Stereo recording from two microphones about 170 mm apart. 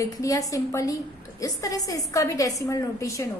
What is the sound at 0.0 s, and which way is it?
A woman's voice, 20° left (ahead or behind).